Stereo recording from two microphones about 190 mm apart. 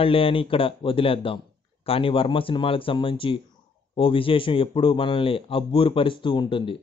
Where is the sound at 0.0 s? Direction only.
30° left (ahead or behind).